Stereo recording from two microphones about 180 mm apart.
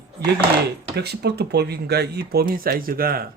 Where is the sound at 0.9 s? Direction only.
65° right (ahead or behind).